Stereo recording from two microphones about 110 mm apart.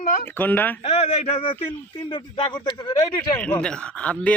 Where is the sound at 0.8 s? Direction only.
70° left (ahead or behind).